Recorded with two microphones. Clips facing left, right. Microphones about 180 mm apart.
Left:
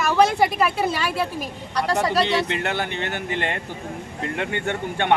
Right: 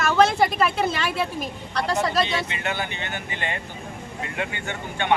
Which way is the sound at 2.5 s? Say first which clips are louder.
Left 4 dB; 65° left (ahead or behind).